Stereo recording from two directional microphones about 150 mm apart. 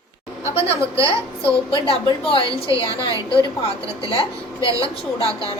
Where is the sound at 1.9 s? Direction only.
35° left (ahead or behind).